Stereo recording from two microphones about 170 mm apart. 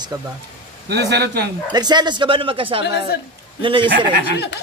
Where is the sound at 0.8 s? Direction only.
75° right (ahead or behind).